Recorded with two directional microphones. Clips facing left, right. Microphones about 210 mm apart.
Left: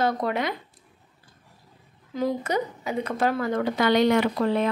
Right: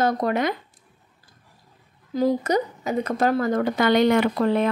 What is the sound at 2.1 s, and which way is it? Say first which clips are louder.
Speech: right 5 dB; 40° right (ahead or behind).